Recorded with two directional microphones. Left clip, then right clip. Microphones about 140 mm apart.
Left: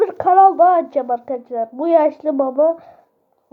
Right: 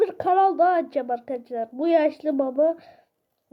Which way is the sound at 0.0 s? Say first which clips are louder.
Left 8 dB; 25° right (ahead or behind).